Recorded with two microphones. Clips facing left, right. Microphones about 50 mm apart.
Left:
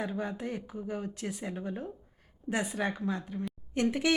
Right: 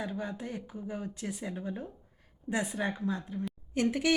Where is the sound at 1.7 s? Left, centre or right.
Centre.